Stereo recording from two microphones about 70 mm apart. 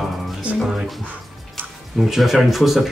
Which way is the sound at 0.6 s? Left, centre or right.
Centre.